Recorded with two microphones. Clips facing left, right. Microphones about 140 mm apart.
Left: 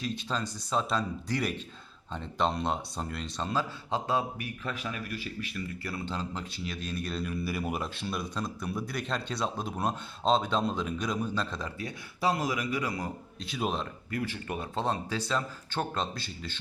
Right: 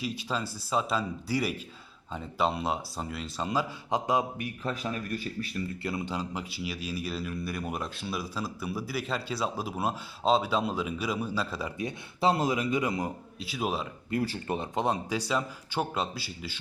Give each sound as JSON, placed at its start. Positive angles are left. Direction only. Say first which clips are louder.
{"t": 0.0, "sound": "speech", "louder": "right 1 dB", "side_deg": -10}
{"t": 4.6, "sound": "speech", "louder": "right 4 dB", "side_deg": -35}
{"t": 5.8, "sound": "speech", "louder": "right 2 dB", "side_deg": -15}
{"t": 11.8, "sound": "speech", "louder": "right 4 dB", "side_deg": -25}
{"t": 13.4, "sound": "a man's voice", "louder": "right 1 dB", "side_deg": -5}
{"t": 14.1, "sound": "speech", "louder": "right 5 dB", "side_deg": -30}
{"t": 14.8, "sound": "speech", "louder": "right 1 dB", "side_deg": -15}